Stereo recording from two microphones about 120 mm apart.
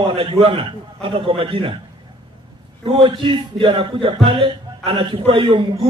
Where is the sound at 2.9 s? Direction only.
45° right (ahead or behind).